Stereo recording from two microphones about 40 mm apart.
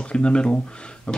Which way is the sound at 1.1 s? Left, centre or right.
Left.